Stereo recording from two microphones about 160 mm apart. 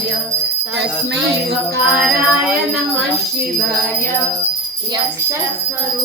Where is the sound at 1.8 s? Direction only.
10° right (ahead or behind).